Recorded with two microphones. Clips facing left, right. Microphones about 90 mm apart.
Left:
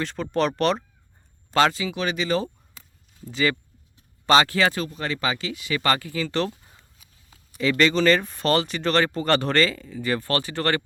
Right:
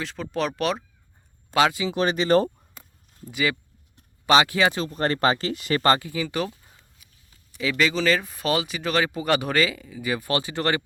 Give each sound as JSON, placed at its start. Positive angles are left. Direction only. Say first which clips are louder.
{"t": 0.0, "sound": "speech", "louder": "left 3 dB", "side_deg": 0}
{"t": 1.9, "sound": "speech", "louder": "right 4 dB", "side_deg": -35}
{"t": 3.2, "sound": "speech", "louder": "left 2 dB", "side_deg": -10}
{"t": 4.9, "sound": "speech", "louder": "right 5 dB", "side_deg": -45}
{"t": 5.8, "sound": "speech", "louder": "right 2 dB", "side_deg": -25}
{"t": 7.6, "sound": "speech", "louder": "left 3 dB", "side_deg": -5}